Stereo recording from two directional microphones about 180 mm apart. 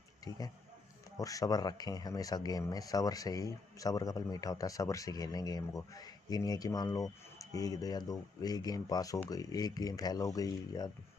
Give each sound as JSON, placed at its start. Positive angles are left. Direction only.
{"t": 1.1, "sound": "speech", "side_deg": 20}